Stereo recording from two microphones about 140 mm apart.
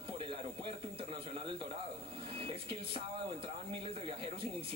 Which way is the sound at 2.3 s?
40° right (ahead or behind).